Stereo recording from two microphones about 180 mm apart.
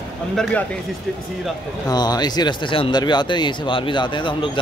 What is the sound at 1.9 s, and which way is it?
Speech, 20° left (ahead or behind).